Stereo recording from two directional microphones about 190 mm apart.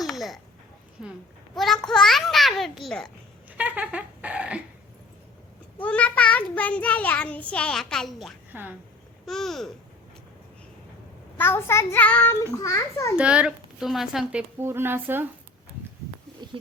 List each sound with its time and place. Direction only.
0.0 s babbling: centre (ahead or behind)
1.0 s a sound: centre (ahead or behind)
1.5 s babbling: centre (ahead or behind)
3.6 s dog: 10° right (ahead or behind)
5.8 s a child's voice: 5° left (ahead or behind)
8.5 s speech: 10° right (ahead or behind)
9.2 s a child's voice: centre (ahead or behind)
11.3 s a child's voice: 10° left (ahead or behind)
13.1 s a child's voice: 5° right (ahead or behind)
14.6 s speech: 10° right (ahead or behind)
16.4 s a sound: 25° right (ahead or behind)